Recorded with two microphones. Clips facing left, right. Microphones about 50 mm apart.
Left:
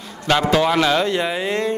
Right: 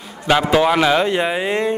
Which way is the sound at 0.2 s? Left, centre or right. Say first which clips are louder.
Right 2 dB; centre.